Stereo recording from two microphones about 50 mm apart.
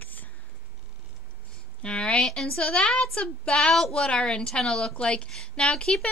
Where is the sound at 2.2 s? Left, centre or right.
Centre.